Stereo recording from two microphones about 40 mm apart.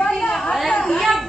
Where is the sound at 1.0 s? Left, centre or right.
Centre.